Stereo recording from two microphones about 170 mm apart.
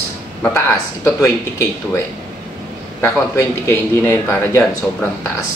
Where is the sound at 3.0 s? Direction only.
15° left (ahead or behind).